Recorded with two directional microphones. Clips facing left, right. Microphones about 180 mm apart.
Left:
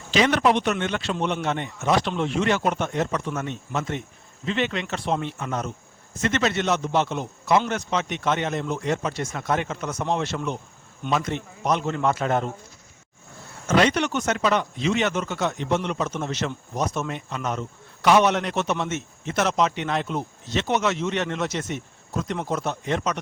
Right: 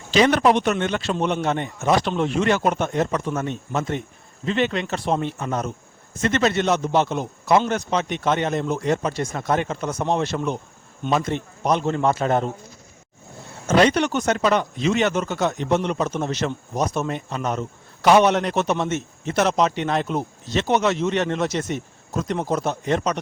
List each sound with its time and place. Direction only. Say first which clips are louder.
0.1 s a man's voice: right 3 dB; 35° right (ahead or behind)
13.7 s speech: right 3 dB; 35° right (ahead or behind)